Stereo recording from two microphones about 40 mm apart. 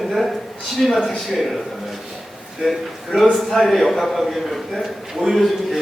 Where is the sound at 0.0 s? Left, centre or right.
Centre.